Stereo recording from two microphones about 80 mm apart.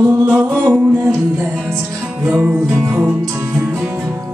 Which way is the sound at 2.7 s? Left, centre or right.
Right.